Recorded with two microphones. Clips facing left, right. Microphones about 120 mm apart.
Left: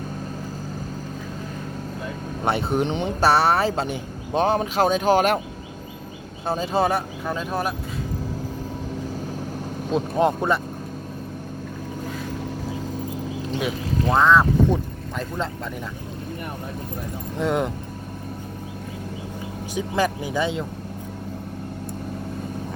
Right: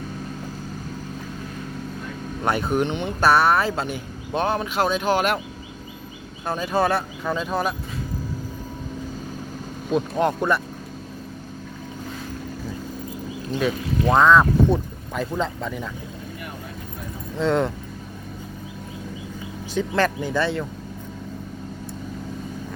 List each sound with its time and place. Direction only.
2.5 s speech: 30° left (ahead or behind)
6.4 s speech: 30° left (ahead or behind)
7.3 s speech: 10° left (ahead or behind)
9.9 s speech: 25° left (ahead or behind)
13.5 s speech: 15° left (ahead or behind)
14.2 s speech: centre (ahead or behind)
17.3 s speech: 15° left (ahead or behind)
19.7 s speech: 10° left (ahead or behind)